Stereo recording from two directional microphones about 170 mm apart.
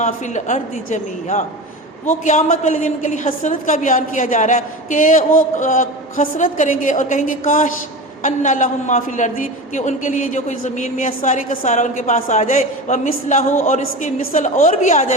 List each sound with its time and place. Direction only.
0.0 s a woman's voice: 45° left (ahead or behind)